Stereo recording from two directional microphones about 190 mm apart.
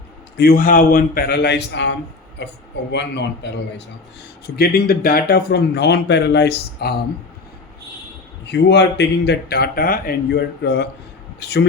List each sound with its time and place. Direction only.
0.3 s speech: 50° left (ahead or behind)
4.5 s speech: 50° left (ahead or behind)
8.4 s speech: 65° left (ahead or behind)